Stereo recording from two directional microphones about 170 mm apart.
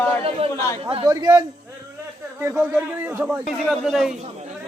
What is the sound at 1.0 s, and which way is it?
A man's voice, 20° right (ahead or behind).